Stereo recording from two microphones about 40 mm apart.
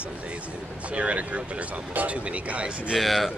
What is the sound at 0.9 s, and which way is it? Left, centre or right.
Speech, right.